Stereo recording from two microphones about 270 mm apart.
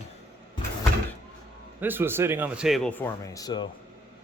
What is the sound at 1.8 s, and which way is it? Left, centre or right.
Speech, centre.